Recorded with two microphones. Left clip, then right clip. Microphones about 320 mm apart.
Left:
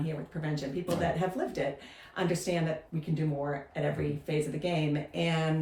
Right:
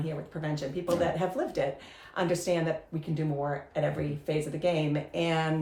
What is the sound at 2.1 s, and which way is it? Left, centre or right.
Speech, centre.